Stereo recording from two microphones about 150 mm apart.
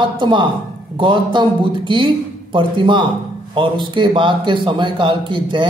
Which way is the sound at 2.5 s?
35° right (ahead or behind).